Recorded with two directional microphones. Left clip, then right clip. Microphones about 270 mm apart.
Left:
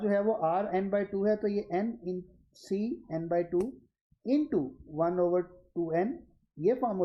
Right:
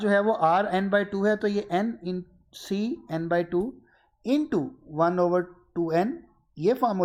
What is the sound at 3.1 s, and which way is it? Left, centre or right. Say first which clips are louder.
Speech: right 4 dB; right.